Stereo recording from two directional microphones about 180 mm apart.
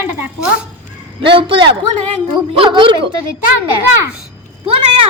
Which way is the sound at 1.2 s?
30° right (ahead or behind).